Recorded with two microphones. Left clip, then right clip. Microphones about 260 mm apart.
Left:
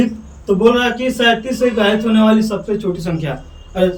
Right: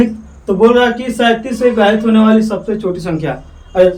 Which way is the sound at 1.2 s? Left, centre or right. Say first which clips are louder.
Right 2 dB; centre.